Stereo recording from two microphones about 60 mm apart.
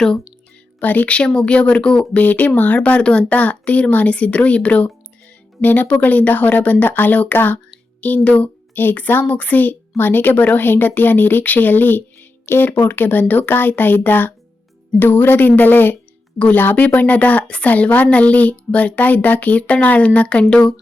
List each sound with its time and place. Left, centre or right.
0.8 s speech: left
2.1 s speech: left